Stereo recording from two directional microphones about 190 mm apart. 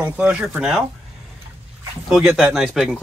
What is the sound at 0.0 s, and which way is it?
Speech, 5° right (ahead or behind).